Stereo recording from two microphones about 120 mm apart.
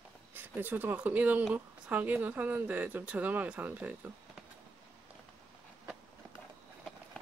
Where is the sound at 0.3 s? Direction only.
15° right (ahead or behind).